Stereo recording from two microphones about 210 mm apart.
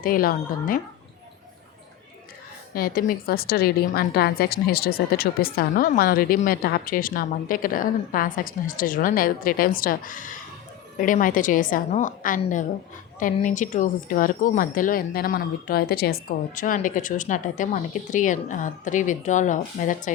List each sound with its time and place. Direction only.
0.0 s a woman's voice: 45° left (ahead or behind)
2.7 s a woman's voice: 45° left (ahead or behind)